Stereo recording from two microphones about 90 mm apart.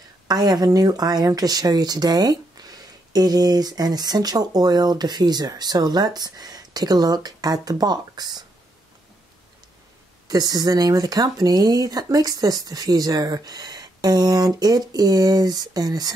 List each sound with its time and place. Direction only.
0.3 s speech: 50° right (ahead or behind)
10.2 s speech: 45° right (ahead or behind)